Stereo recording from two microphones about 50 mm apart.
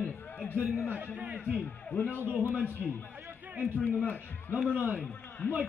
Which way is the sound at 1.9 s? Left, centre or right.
Left.